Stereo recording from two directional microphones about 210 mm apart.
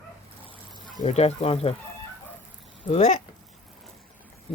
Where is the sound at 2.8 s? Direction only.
30° left (ahead or behind).